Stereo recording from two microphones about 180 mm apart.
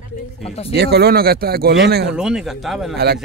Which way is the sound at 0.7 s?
65° right (ahead or behind).